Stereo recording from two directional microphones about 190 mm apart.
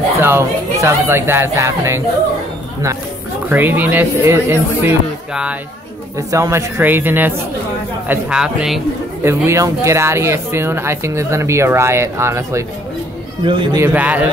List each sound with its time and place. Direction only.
0.2 s speech: 15° right (ahead or behind)
3.4 s speech: 10° right (ahead or behind)
6.1 s speech: 15° right (ahead or behind)
9.2 s speech: 15° right (ahead or behind)
13.4 s a man's voice: 25° right (ahead or behind)
13.7 s speech: 10° right (ahead or behind)